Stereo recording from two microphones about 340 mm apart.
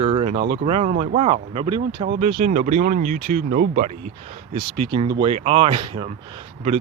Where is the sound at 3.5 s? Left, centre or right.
Right.